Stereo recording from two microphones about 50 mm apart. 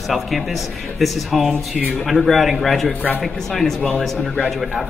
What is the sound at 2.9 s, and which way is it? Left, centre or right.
Speech, left.